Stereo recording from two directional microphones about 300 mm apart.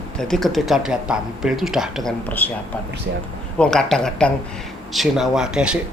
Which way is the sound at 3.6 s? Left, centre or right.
Centre.